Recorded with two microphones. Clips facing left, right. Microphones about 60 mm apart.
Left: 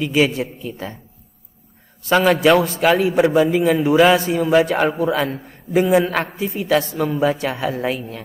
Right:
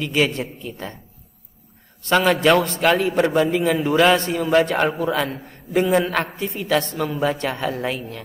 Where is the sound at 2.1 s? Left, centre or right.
Centre.